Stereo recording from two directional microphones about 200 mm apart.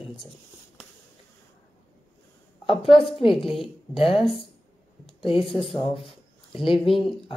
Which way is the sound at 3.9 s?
25° left (ahead or behind).